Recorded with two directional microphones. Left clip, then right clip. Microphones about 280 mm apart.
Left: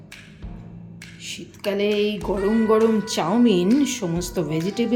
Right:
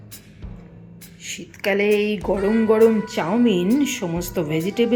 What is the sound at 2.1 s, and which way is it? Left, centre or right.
Speech, centre.